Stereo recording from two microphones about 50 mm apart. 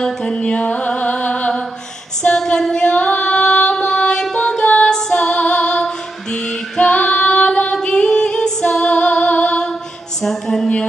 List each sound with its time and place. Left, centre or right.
0.0 s music: centre
0.5 s music: left
2.3 s female singing: centre
5.1 s music: left
6.3 s female singing: left
10.2 s a sound: centre